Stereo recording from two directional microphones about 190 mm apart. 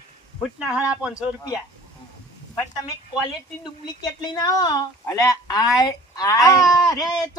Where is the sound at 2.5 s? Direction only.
20° left (ahead or behind).